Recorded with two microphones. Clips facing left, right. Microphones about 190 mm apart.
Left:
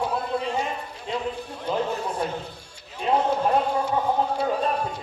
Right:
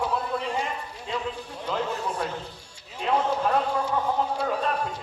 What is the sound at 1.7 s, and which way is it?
Speech, 25° left (ahead or behind).